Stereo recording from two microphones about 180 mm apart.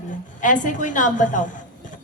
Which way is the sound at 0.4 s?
45° left (ahead or behind).